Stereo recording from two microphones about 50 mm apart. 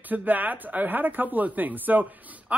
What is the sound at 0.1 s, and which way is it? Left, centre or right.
Speech, right.